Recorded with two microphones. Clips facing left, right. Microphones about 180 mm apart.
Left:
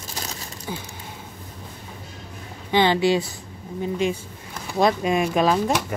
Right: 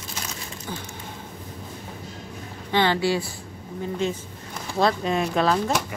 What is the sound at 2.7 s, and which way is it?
Speech, 15° left (ahead or behind).